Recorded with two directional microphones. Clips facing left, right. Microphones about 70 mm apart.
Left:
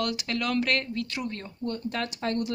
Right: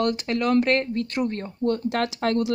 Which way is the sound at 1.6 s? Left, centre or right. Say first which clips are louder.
Right 8 dB; right.